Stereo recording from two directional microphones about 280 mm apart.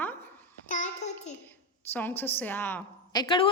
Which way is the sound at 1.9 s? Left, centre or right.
Centre.